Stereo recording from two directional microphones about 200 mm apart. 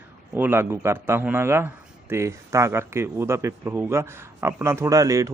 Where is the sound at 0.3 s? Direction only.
10° right (ahead or behind).